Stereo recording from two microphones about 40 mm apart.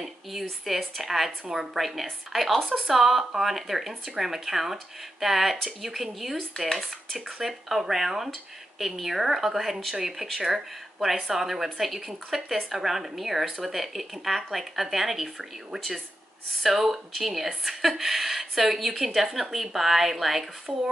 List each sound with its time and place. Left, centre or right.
0.0 s speech: centre
7.3 s speech: centre
16.6 s speech: centre